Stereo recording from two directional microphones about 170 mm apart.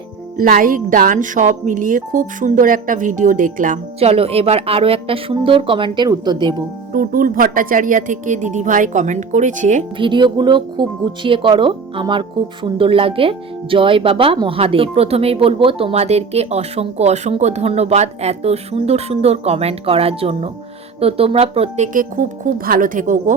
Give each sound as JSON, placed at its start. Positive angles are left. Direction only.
{"t": 0.3, "sound": "speech", "side_deg": -55}
{"t": 4.0, "sound": "speech", "side_deg": -35}
{"t": 6.9, "sound": "speech", "side_deg": -55}
{"t": 10.0, "sound": "speech", "side_deg": -30}
{"t": 21.9, "sound": "speech", "side_deg": -50}